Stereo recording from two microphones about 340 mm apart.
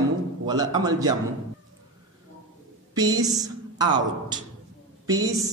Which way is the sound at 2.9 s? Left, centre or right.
Centre.